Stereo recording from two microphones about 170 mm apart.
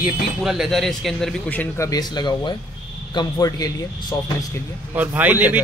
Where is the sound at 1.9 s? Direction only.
25° left (ahead or behind).